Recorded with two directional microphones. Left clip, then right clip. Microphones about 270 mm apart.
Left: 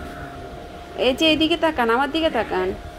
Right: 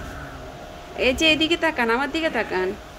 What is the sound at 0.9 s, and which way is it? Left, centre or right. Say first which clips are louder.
A woman's voice: left 1 dB; centre.